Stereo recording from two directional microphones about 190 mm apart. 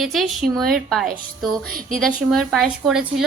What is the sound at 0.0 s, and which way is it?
A woman's voice, centre (ahead or behind).